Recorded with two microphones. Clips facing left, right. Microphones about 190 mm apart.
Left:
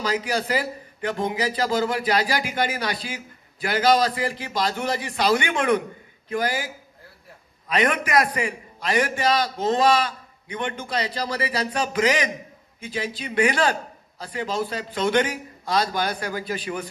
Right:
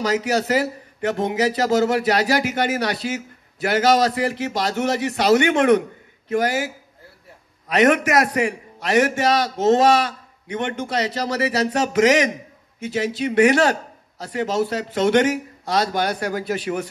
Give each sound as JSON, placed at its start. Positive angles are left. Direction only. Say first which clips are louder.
{"t": 0.0, "sound": "a man's voice", "louder": "right 4 dB", "side_deg": -70}